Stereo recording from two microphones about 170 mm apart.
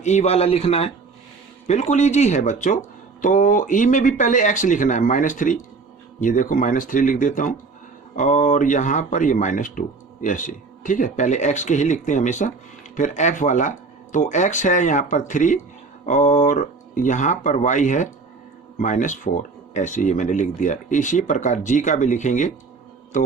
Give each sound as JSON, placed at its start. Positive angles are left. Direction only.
{"t": 0.0, "sound": "a man's voice", "side_deg": 45}